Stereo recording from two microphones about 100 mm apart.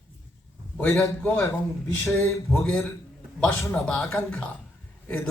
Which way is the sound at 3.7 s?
10° left (ahead or behind).